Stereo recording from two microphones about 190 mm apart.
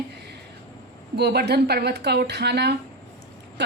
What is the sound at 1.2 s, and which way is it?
A woman's voice, 60° right (ahead or behind).